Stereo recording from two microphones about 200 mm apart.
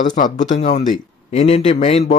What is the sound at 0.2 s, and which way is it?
A man's voice, 40° left (ahead or behind).